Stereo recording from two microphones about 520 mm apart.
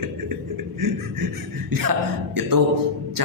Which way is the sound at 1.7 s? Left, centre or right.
Right.